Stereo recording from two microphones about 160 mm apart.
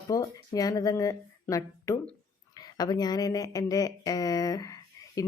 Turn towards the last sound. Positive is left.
turn(degrees=20)  # may be behind; listen again after turning